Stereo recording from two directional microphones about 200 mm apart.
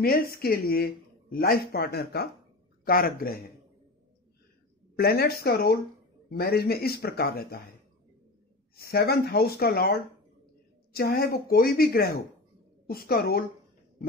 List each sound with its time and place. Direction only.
0.0 s speech: 50° left (ahead or behind)
4.9 s speech: 50° left (ahead or behind)
8.7 s speech: 50° left (ahead or behind)